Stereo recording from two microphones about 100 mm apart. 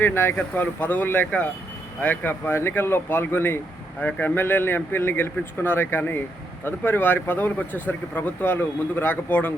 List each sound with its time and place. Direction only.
0.0 s speech: 25° left (ahead or behind)